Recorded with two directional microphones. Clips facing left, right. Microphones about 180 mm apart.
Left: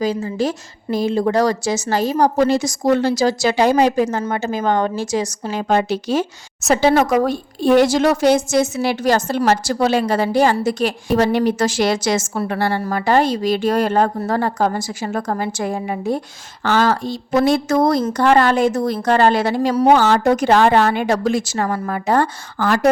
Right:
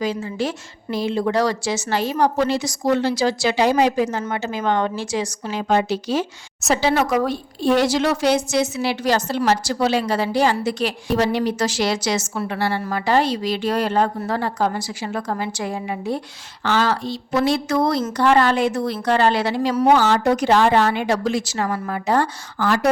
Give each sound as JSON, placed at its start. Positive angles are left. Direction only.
{"t": 0.0, "sound": "a woman's voice", "side_deg": 40}